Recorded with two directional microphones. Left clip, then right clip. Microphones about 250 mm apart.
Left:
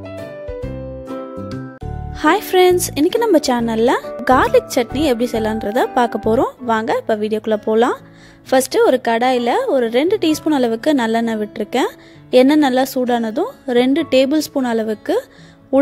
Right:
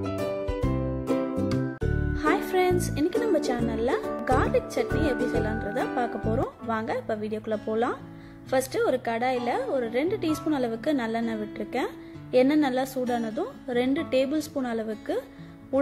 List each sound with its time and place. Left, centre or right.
2.2 s a woman's voice: left